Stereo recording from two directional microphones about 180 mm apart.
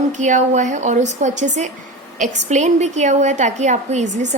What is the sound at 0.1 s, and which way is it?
A woman's voice, 40° right (ahead or behind).